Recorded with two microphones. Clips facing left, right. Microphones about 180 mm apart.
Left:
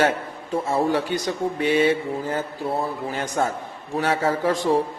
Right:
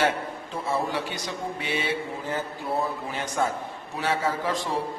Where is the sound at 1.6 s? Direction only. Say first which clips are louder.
Left 11 dB; 45° left (ahead or behind).